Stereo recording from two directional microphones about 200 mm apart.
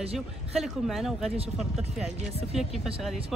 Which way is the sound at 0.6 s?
Centre (ahead or behind).